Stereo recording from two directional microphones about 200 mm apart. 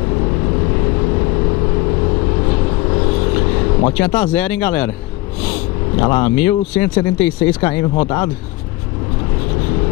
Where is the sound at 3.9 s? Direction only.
10° left (ahead or behind).